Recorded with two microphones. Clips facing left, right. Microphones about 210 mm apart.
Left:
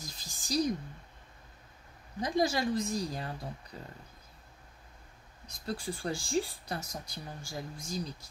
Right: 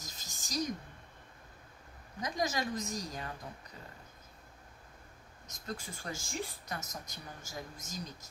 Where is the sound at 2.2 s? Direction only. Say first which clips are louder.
Left 5 dB; 30° left (ahead or behind).